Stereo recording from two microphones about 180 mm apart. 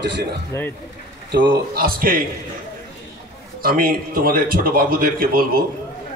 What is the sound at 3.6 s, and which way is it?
A man's voice, 55° right (ahead or behind).